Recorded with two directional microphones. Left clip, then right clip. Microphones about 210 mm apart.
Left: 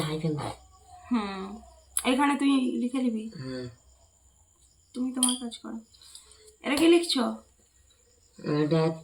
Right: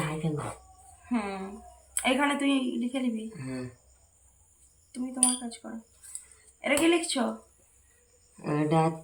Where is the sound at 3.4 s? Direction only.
20° right (ahead or behind).